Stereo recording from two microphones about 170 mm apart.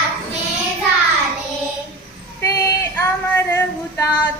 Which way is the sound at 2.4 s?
20° left (ahead or behind).